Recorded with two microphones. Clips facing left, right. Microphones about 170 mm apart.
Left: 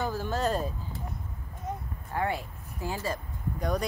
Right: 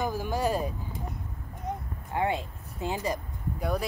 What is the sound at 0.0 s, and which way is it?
Speech, 15° right (ahead or behind).